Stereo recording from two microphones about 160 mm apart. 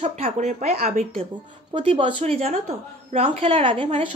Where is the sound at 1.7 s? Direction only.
35° right (ahead or behind).